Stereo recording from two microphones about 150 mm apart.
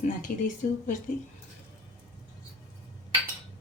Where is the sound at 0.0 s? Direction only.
65° left (ahead or behind).